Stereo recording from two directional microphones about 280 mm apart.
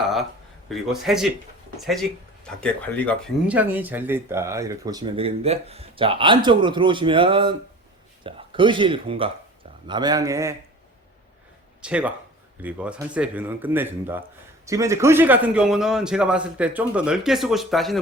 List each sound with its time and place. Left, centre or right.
0.7 s speech: centre
11.8 s speech: centre